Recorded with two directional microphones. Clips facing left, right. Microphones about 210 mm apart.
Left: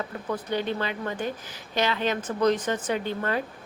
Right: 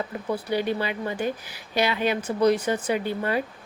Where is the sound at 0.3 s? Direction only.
10° right (ahead or behind).